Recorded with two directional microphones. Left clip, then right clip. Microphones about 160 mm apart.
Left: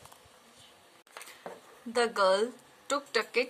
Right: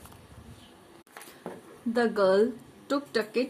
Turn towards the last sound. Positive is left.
turn(degrees=30)  # may be behind; listen again after turning